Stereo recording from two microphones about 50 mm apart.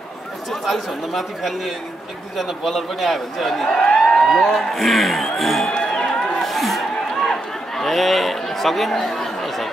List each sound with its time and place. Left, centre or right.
0.5 s speech: centre
3.6 s speech: centre
4.2 s speech: centre
5.7 s a sound: centre